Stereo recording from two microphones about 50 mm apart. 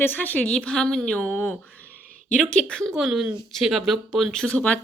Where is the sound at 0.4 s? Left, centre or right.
Centre.